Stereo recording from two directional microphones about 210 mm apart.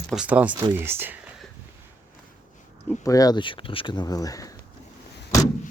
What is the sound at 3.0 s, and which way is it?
Speech, 15° left (ahead or behind).